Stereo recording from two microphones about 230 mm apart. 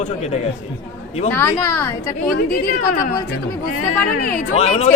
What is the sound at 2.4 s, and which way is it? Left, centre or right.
Speech, left.